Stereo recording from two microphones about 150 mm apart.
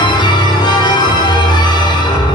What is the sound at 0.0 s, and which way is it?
Music, 30° left (ahead or behind).